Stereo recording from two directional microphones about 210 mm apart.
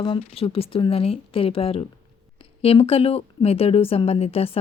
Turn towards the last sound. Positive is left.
turn(degrees=30)  # may be behind; listen again after turning